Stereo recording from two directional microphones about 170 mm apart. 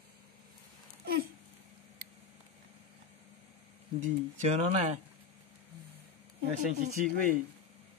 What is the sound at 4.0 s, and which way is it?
Speech, 45° right (ahead or behind).